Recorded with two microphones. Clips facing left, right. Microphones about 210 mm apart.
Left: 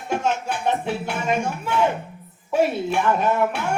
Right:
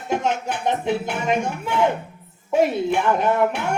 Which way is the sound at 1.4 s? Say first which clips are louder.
Right 1 dB; 20° right (ahead or behind).